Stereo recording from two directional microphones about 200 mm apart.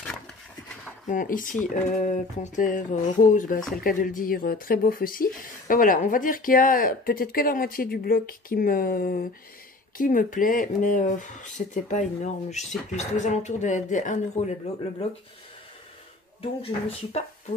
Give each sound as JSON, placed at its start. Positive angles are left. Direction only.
{"t": 1.0, "sound": "speech", "side_deg": 40}
{"t": 16.3, "sound": "speech", "side_deg": 30}